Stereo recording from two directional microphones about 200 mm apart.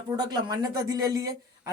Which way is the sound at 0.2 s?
20° right (ahead or behind).